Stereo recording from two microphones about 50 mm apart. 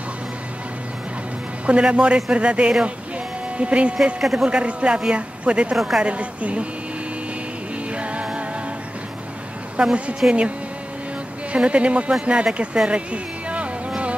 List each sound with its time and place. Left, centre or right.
1.7 s speech: right
4.2 s speech: centre
4.5 s speech: right
5.8 s speech: centre
6.0 s speech: right
7.9 s music: right
9.8 s a woman's voice: centre
11.5 s speech: right
12.7 s music: centre